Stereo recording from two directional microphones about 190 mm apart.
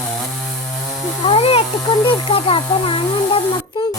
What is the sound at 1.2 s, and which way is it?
Speech, 30° left (ahead or behind).